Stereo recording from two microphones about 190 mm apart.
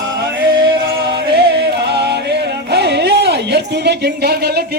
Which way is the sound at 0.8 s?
60° right (ahead or behind).